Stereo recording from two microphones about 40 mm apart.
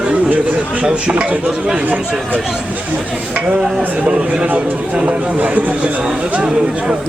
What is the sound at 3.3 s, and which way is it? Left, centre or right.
Speech, right.